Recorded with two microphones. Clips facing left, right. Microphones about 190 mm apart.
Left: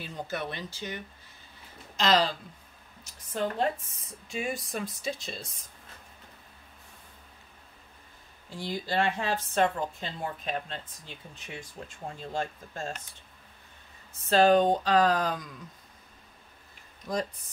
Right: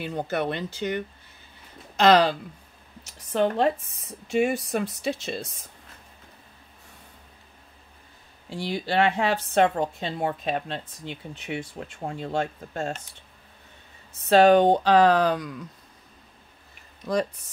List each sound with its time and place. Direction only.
0.0 s a woman's voice: 60° right (ahead or behind)
8.5 s a woman's voice: 70° right (ahead or behind)
14.3 s a woman's voice: 70° right (ahead or behind)
17.1 s a woman's voice: 75° right (ahead or behind)